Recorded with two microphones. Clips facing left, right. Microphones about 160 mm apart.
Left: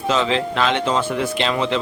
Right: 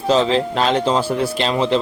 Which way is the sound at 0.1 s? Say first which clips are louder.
Right 4 dB; 35° right (ahead or behind).